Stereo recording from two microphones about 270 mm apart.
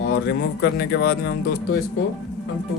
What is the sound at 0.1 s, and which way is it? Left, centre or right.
Speech, left.